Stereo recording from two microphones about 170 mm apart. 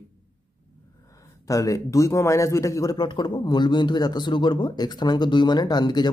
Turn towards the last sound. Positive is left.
turn(degrees=25)  # may be behind; listen again after turning